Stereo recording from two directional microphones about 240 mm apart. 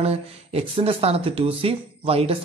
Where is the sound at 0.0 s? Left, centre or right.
Right.